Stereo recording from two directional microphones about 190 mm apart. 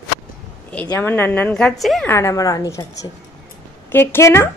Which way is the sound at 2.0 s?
15° left (ahead or behind).